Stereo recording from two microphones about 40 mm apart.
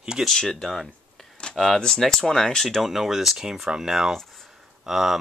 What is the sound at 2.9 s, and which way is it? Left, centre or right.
Speech, centre.